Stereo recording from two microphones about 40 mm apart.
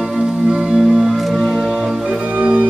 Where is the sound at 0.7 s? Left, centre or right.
Centre.